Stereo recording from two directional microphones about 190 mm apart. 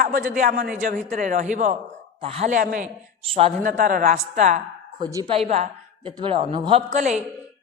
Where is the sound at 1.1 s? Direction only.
40° right (ahead or behind).